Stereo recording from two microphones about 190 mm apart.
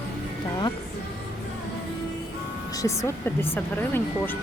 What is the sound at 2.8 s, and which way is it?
Speech, 15° left (ahead or behind).